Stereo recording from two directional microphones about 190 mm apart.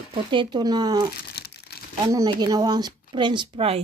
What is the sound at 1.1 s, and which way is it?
Crumpling, 55° left (ahead or behind).